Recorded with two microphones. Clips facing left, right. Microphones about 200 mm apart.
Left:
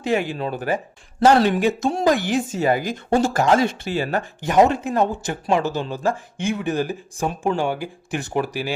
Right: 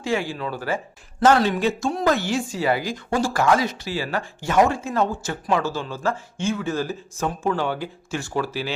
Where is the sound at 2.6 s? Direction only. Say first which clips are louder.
Left 2 dB; 45° left (ahead or behind).